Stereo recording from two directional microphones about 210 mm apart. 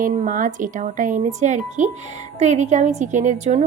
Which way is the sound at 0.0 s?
40° right (ahead or behind).